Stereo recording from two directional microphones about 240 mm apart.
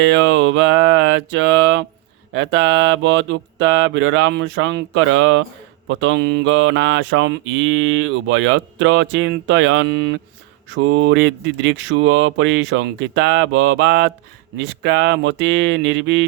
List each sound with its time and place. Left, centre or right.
0.1 s mantra: right